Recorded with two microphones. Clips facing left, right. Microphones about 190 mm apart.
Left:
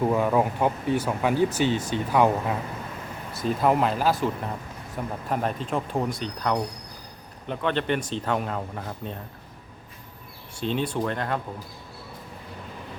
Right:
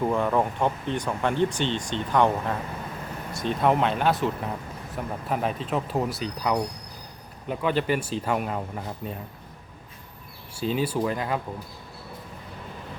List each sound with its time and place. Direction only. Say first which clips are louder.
0.0 s speech: left 2 dB; 5° left (ahead or behind)
10.6 s speech: right 1 dB; 5° right (ahead or behind)